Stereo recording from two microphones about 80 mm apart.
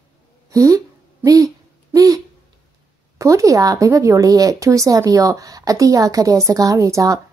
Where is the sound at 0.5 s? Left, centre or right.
Right.